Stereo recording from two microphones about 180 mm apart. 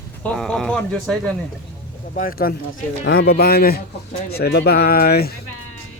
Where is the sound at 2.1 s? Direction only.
55° left (ahead or behind).